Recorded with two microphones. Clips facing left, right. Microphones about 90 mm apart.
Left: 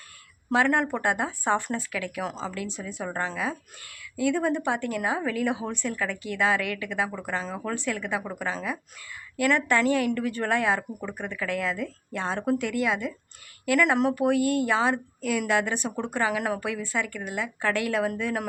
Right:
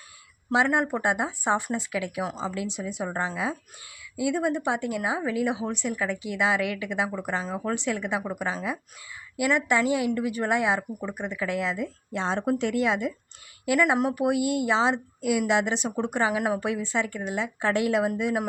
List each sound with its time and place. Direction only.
0.5 s a woman's voice: 15° right (ahead or behind)
13.7 s a woman's voice: 15° right (ahead or behind)